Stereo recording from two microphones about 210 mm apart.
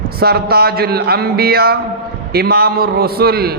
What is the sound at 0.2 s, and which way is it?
A man's voice, 45° right (ahead or behind).